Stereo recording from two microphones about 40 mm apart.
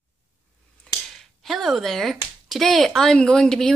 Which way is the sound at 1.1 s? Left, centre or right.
Centre.